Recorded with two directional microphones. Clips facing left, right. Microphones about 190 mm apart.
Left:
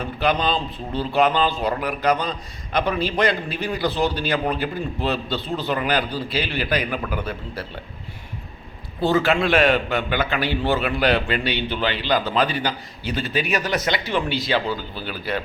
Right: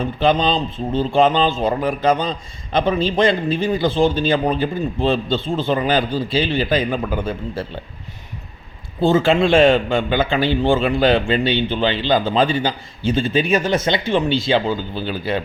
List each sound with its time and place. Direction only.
0.2 s a man's voice: 25° right (ahead or behind)
9.0 s a man's voice: 25° right (ahead or behind)